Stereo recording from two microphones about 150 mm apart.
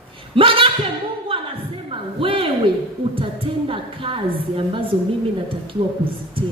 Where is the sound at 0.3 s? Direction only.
35° right (ahead or behind).